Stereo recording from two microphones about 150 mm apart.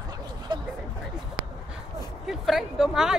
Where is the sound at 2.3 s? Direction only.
Centre (ahead or behind).